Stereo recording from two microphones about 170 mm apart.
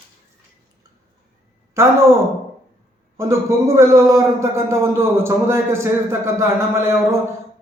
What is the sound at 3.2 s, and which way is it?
A man's voice, 20° right (ahead or behind).